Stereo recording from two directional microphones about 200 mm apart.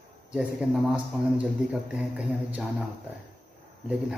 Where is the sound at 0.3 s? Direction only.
5° right (ahead or behind).